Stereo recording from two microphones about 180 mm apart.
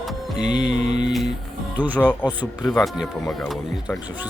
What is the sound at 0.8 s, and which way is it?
Mantra, 40° right (ahead or behind).